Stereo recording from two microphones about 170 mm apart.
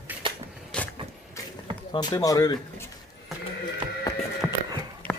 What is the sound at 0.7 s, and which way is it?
Vehicle, 5° left (ahead or behind).